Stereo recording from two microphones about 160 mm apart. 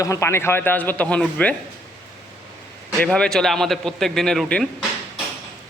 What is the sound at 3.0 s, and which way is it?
Speech, 5° left (ahead or behind).